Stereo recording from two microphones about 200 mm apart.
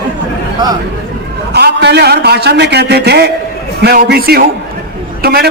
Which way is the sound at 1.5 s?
55° right (ahead or behind).